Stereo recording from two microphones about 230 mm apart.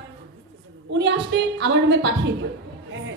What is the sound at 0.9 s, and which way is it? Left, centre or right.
A woman's voice, right.